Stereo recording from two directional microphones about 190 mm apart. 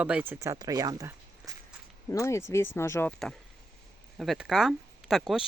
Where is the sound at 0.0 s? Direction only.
5° right (ahead or behind).